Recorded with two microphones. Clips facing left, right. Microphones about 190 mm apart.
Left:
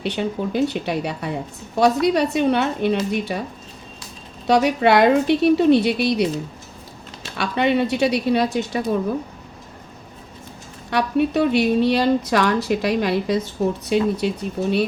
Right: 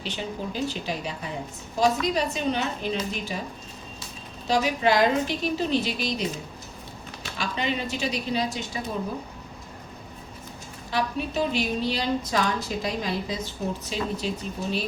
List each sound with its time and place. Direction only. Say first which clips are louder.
0.0 s a woman's voice: left 8 dB; 65° left (ahead or behind)
4.4 s a woman's voice: left 6 dB; 65° left (ahead or behind)
7.3 s a woman's voice: left 10 dB; 65° left (ahead or behind)
10.9 s a woman's voice: left 8 dB; 65° left (ahead or behind)